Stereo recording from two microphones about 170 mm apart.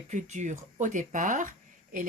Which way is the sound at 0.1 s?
45° right (ahead or behind).